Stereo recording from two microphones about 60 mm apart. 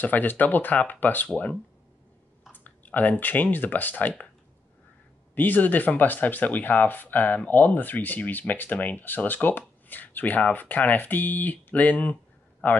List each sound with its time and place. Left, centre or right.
0.0 s speech: left
5.3 s a man's voice: left